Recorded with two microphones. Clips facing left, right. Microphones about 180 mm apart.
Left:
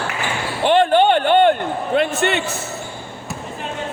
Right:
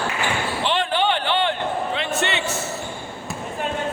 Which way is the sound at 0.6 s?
50° left (ahead or behind).